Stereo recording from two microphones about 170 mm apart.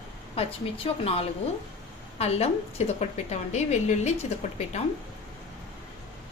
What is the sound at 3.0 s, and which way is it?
A woman's voice, 40° left (ahead or behind).